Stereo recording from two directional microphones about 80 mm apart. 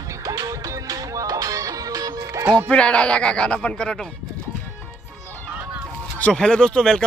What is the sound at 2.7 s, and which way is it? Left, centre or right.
Speech, centre.